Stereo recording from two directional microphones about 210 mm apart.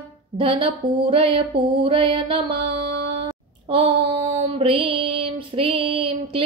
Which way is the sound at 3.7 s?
25° right (ahead or behind).